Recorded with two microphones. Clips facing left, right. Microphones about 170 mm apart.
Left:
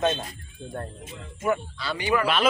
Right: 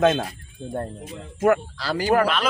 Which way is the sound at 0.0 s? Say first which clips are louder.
Right 6 dB; 90° right.